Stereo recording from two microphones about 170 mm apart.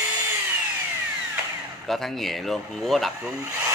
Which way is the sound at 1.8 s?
Centre (ahead or behind).